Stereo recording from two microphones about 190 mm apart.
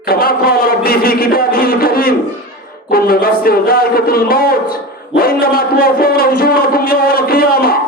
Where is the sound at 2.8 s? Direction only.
50° left (ahead or behind).